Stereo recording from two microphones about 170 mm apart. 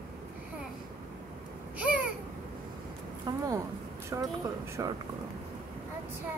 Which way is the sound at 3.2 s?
20° right (ahead or behind).